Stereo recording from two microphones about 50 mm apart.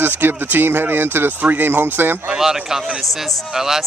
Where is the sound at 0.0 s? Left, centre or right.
Right.